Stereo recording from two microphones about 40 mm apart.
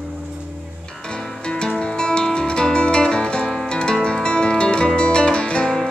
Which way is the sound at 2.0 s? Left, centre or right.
Left.